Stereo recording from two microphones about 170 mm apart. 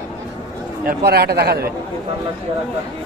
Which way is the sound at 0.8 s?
70° right (ahead or behind).